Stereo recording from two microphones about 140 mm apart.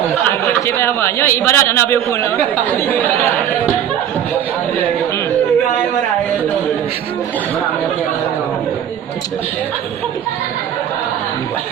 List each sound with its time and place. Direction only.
0.4 s a man's voice: 20° left (ahead or behind)